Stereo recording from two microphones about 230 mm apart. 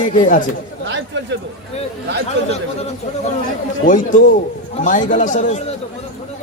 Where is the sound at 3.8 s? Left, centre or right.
Left.